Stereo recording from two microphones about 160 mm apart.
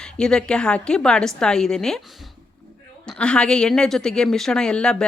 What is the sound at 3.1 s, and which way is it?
Speech, 5° left (ahead or behind).